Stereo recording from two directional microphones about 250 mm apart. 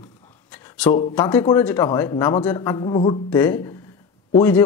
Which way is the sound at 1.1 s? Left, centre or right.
Centre.